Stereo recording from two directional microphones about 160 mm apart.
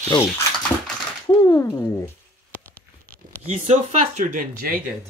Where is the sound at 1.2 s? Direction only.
20° left (ahead or behind).